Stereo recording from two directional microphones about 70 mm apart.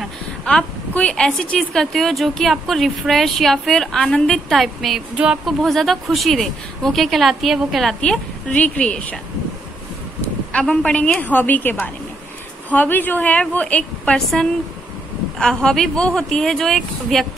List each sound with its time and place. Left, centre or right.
0.5 s a woman's voice: centre
4.6 s a woman's voice: centre
5.1 s speech: centre
5.4 s a woman's voice: centre
8.0 s speech: centre
10.5 s a woman's voice: centre
14.1 s speech: centre